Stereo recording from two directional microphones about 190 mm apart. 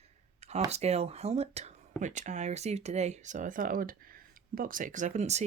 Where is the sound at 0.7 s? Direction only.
35° right (ahead or behind).